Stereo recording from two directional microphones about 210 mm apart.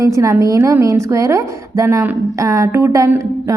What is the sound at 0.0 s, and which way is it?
A woman's voice, 15° right (ahead or behind).